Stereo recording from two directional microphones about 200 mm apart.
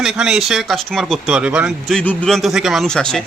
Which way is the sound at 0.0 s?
5° right (ahead or behind).